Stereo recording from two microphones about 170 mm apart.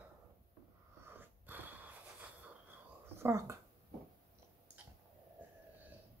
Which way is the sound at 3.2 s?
15° right (ahead or behind).